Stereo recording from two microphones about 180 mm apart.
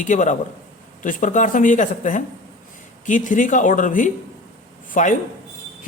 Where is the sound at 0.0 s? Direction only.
45° left (ahead or behind).